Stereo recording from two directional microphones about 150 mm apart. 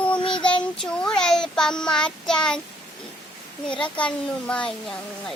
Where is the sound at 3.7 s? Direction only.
5° left (ahead or behind).